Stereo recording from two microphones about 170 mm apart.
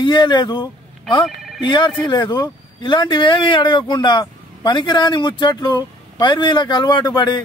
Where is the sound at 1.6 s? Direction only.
25° left (ahead or behind).